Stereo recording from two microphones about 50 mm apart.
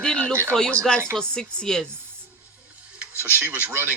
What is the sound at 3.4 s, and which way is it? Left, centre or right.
Speech, right.